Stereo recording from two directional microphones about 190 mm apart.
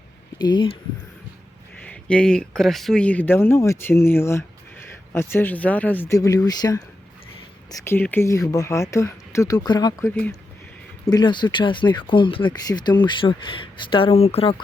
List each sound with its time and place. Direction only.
0.3 s speech: 25° left (ahead or behind)
1.9 s speech: 5° left (ahead or behind); by 10.1 s 20° left (ahead or behind)
11.1 s speech: 25° left (ahead or behind)